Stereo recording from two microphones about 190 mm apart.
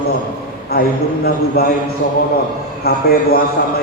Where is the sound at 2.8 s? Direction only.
55° left (ahead or behind).